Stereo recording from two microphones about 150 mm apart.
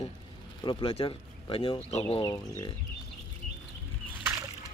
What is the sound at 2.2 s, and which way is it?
Speech, 20° left (ahead or behind).